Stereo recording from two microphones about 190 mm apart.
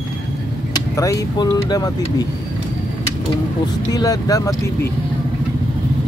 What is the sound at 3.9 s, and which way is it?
Speech, 20° left (ahead or behind).